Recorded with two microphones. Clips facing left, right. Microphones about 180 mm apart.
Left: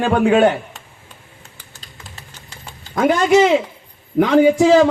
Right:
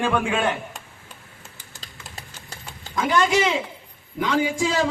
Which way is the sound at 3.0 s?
55° left (ahead or behind).